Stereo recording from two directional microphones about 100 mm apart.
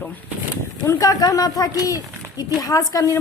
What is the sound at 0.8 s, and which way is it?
A woman's voice, 35° left (ahead or behind).